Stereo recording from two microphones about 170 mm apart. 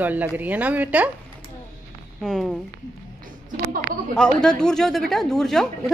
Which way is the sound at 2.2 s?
Centre (ahead or behind).